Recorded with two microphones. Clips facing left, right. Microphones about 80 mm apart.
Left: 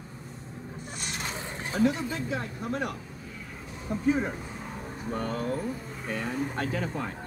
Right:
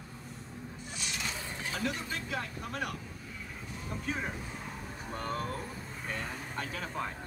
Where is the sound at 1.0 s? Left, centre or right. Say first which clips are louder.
Left 3 dB; left.